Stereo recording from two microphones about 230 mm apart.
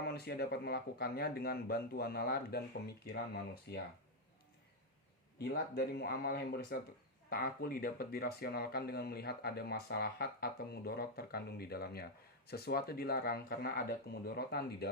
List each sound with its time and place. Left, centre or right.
0.0 s speech: left
5.4 s speech: left